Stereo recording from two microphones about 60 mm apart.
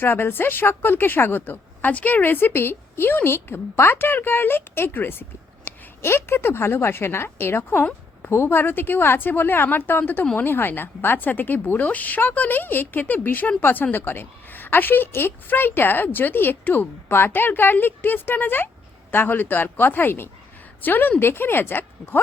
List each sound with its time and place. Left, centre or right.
0.0 s a woman's voice: left
5.7 s a sound: left
6.0 s a woman's voice: left